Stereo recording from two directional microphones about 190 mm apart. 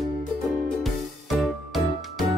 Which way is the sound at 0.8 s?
Centre (ahead or behind).